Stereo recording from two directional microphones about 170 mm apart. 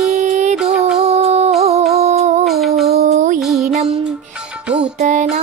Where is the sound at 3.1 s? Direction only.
45° right (ahead or behind).